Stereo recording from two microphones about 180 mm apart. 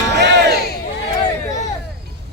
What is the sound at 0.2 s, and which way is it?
Crowd, 65° right (ahead or behind).